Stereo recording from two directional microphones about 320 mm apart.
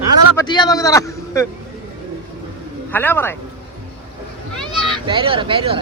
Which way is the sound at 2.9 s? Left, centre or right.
Centre.